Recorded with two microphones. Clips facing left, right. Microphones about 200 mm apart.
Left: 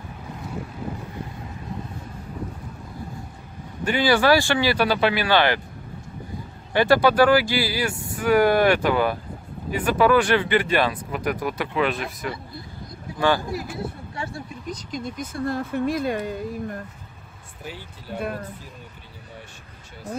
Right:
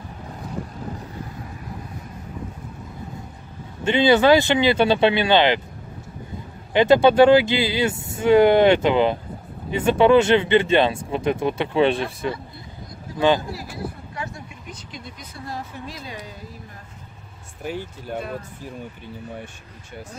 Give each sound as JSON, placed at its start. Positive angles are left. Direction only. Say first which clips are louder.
{"t": 3.8, "sound": "speech", "louder": "right 4 dB", "side_deg": -25}
{"t": 6.7, "sound": "speech", "louder": "right 3 dB", "side_deg": -20}
{"t": 13.5, "sound": "speech", "louder": "left 2 dB", "side_deg": 20}